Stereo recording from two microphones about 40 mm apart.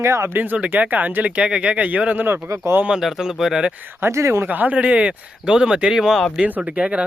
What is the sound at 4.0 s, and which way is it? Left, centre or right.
Speech, right.